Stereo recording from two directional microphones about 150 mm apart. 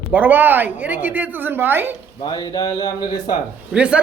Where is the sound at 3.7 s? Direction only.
10° right (ahead or behind).